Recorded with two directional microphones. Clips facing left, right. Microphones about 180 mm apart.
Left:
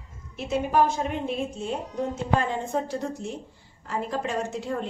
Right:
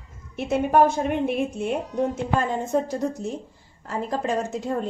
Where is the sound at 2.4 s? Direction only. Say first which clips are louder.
Right 4 dB; 45° right (ahead or behind).